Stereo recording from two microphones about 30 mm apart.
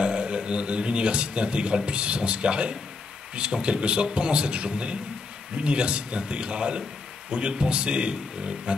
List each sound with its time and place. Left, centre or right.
0.0 s a man's voice: right